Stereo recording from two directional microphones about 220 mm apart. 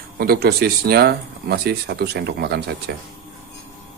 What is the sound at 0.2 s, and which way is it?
Speech, 45° right (ahead or behind).